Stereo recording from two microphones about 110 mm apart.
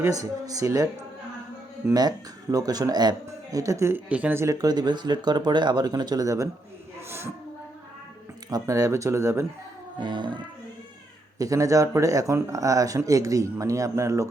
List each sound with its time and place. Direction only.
0.0 s speech: 30° right (ahead or behind)
1.9 s speech: 35° right (ahead or behind); by 4.5 s 20° right (ahead or behind)
4.5 s speech: 40° right (ahead or behind)
8.4 s speech: 30° right (ahead or behind)
10.0 s child singing: 45° right (ahead or behind)
11.3 s speech: 30° right (ahead or behind)